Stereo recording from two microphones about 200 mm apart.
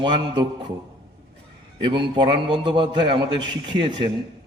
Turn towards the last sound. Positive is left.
turn(degrees=-25)  # may be behind; listen again after turning